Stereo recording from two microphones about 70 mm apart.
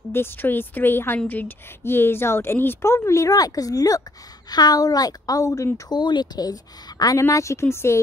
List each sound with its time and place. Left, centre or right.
0.1 s a woman's voice: left
3.3 s speech: left
5.9 s speech: left